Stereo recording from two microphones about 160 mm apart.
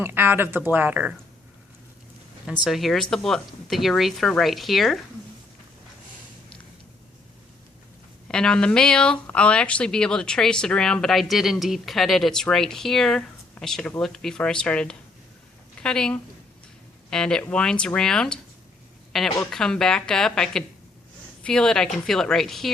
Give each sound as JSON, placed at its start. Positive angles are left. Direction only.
{"t": 0.0, "sound": "speech", "side_deg": -15}
{"t": 2.5, "sound": "speech", "side_deg": 0}
{"t": 8.3, "sound": "speech", "side_deg": 5}
{"t": 19.4, "sound": "speech", "side_deg": 5}